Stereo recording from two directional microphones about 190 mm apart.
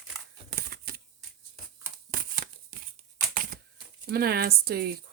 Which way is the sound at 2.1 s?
45° right (ahead or behind).